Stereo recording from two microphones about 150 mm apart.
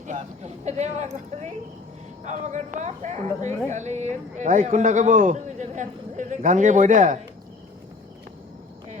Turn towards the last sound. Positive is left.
turn(degrees=-60)  # may be behind; listen again after turning